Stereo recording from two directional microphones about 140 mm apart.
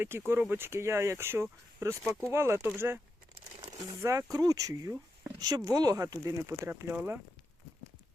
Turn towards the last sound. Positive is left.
turn(degrees=-15)  # may be behind; listen again after turning